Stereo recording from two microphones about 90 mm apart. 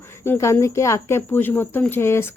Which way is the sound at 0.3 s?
30° left (ahead or behind).